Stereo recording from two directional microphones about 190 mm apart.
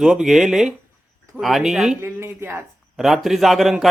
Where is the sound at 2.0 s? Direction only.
15° right (ahead or behind).